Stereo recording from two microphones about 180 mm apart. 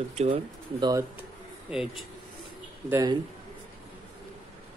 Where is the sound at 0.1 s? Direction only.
30° right (ahead or behind).